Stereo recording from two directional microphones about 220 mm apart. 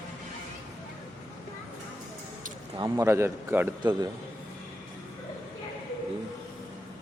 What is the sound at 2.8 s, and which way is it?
Speech, 15° right (ahead or behind).